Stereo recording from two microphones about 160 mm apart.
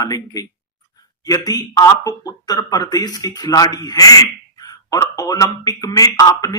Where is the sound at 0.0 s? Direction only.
20° left (ahead or behind).